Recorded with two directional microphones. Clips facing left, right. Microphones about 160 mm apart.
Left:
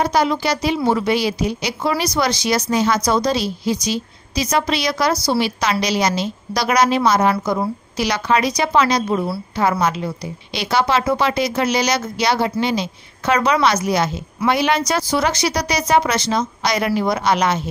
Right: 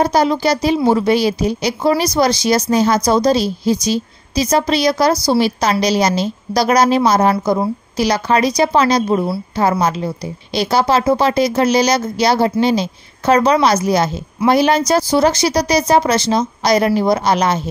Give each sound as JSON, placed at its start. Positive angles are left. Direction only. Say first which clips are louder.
{"t": 0.0, "sound": "a woman's voice", "louder": "right 4 dB", "side_deg": -40}